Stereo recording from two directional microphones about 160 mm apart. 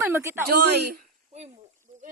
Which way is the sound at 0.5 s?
85° right.